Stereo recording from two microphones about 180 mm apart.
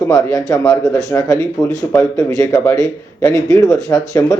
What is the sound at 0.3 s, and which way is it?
A man's voice, 20° left (ahead or behind).